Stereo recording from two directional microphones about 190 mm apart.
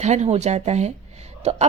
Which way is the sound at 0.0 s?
35° right (ahead or behind).